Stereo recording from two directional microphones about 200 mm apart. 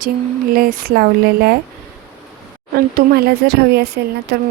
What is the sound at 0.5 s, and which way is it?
Speech, 45° right (ahead or behind).